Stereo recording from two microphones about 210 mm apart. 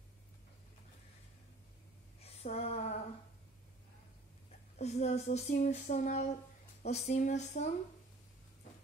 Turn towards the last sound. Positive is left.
turn(degrees=35)  # may be behind; listen again after turning